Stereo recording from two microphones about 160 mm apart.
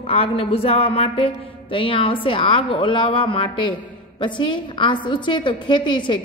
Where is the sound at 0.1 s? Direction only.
35° left (ahead or behind).